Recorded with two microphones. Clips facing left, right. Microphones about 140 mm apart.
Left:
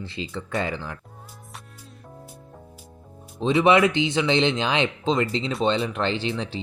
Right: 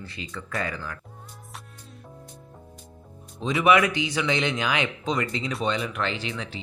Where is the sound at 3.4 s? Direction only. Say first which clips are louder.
Left 3 dB; 30° left (ahead or behind).